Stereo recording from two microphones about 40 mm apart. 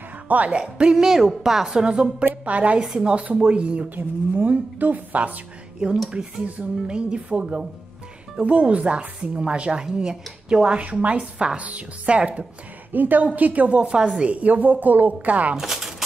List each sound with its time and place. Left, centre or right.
0.3 s speech: right
0.6 s speech: right
0.9 s a woman's voice: centre
1.9 s speech: right
2.4 s speech: right
2.8 s a woman's voice: centre
3.1 s speech: right
3.9 s speech: right
6.0 s speech: right
12.9 s speech: right
13.7 s speech: right
15.5 s speech: centre